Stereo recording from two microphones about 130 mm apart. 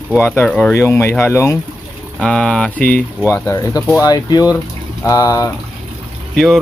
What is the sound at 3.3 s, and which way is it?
Speech, 20° left (ahead or behind).